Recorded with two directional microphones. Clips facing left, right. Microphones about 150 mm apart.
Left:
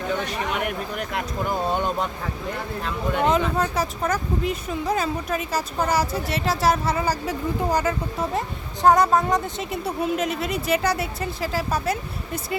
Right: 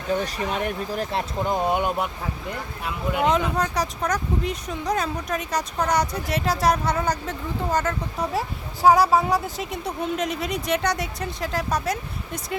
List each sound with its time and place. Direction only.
0.3 s speech: 30° right (ahead or behind)
1.5 s speech: 15° right (ahead or behind); by 8.3 s 10° left (ahead or behind)
8.3 s speech: 5° right (ahead or behind)